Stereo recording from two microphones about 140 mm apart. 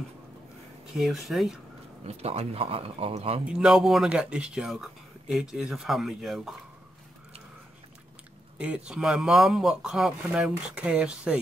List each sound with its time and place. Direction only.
0.9 s speech: centre (ahead or behind)
2.0 s speech: 45° right (ahead or behind)
3.4 s speech: 5° right (ahead or behind)
8.5 s speech: 5° right (ahead or behind)